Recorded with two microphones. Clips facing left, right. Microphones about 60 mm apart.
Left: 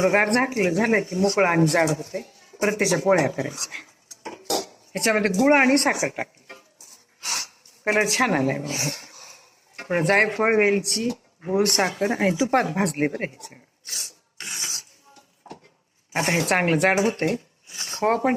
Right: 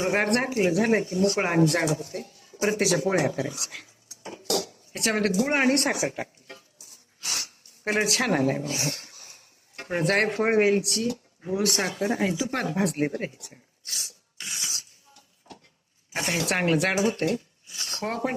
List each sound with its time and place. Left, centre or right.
0.0 s speech: left
13.9 s a sound: left
16.1 s speech: left